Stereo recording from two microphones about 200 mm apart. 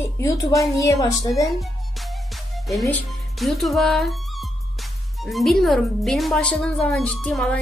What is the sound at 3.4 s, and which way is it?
Speech, centre (ahead or behind).